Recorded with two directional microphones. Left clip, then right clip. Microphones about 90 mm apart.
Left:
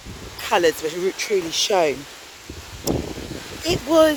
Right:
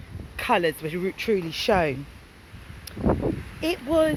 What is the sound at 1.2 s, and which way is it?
Speech, 35° left (ahead or behind).